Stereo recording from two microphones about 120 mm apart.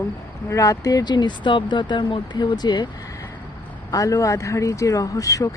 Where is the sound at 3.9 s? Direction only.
30° left (ahead or behind).